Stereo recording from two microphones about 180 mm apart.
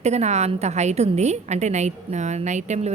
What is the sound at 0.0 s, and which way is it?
A woman's voice, 40° right (ahead or behind).